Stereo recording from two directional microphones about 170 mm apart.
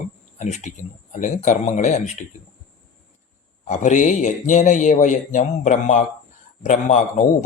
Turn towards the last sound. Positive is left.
turn(degrees=45)  # may be behind; listen again after turning